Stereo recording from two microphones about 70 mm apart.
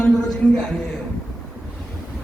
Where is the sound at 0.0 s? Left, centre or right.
Centre.